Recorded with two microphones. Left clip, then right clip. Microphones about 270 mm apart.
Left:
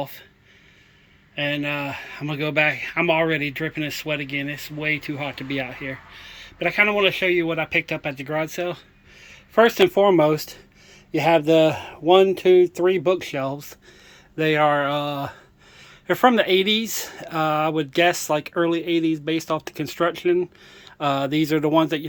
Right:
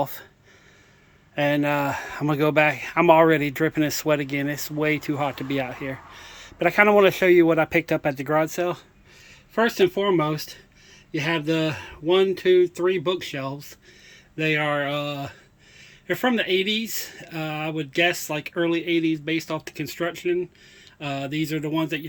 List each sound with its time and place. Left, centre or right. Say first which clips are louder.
0.0 s speech: right 4 dB; centre
1.4 s speech: right 3 dB; centre
9.2 s a sound: left 6 dB; centre
9.9 s speech: left 6 dB; centre
11.4 s speech: left 8 dB; left
12.3 s speech: left 3 dB; centre